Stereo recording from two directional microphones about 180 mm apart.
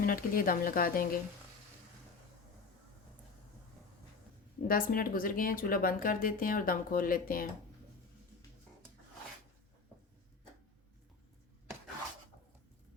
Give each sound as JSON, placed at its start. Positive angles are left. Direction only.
{"t": 0.0, "sound": "speech", "side_deg": 50}
{"t": 4.7, "sound": "speech", "side_deg": 50}